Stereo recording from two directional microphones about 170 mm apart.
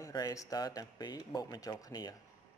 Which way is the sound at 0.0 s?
20° left (ahead or behind).